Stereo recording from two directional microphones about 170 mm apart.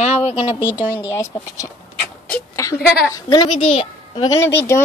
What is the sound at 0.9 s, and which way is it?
Speech, 15° left (ahead or behind).